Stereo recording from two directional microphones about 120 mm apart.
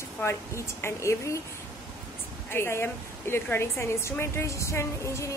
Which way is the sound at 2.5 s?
20° left (ahead or behind).